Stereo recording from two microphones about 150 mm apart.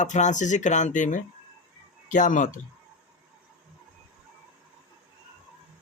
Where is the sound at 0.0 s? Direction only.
55° left (ahead or behind).